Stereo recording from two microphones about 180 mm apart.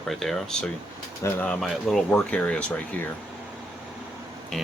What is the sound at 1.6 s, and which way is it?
Speech, centre (ahead or behind).